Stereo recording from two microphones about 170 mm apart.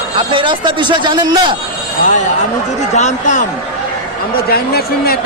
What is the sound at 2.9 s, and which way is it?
Speech, 40° left (ahead or behind).